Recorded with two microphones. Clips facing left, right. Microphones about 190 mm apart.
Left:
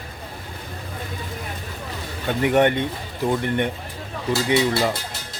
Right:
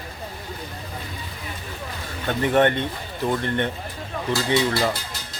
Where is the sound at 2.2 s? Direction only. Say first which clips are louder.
Left 1 dB; 10° left (ahead or behind).